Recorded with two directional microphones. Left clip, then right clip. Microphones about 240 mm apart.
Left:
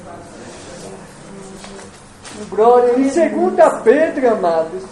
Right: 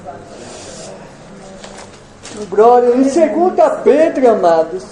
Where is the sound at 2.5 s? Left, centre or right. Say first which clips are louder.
Right 3 dB; centre.